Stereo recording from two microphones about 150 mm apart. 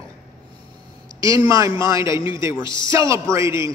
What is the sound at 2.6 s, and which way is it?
Speech, 30° left (ahead or behind).